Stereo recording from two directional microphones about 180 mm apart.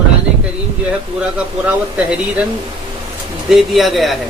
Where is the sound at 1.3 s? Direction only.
5° right (ahead or behind).